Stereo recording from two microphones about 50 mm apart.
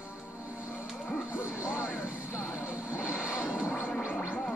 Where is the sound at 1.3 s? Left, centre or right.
Right.